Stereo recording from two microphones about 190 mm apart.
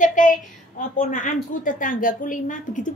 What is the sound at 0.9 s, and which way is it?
A woman's voice, 40° left (ahead or behind).